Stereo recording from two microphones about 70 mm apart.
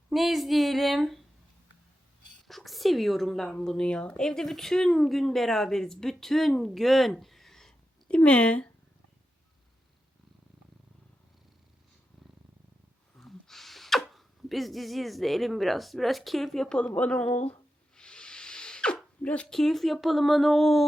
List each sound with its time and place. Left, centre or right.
0.1 s a woman's voice: centre
2.5 s a woman's voice: centre
7.1 s a sound: centre
13.1 s a sound: centre
19.2 s speech: centre
19.5 s a woman's voice: centre